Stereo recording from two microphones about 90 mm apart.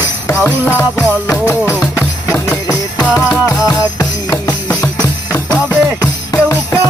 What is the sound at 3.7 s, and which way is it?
Music, 45° left (ahead or behind).